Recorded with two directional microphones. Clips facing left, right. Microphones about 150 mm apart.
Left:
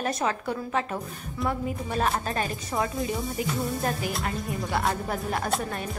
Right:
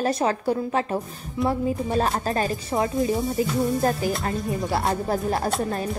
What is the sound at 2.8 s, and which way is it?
Speech, 25° right (ahead or behind).